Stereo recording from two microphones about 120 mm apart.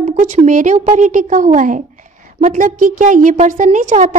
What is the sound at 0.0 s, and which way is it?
A woman's voice, 75° right (ahead or behind).